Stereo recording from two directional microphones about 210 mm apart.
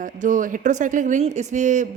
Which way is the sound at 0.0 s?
35° right (ahead or behind).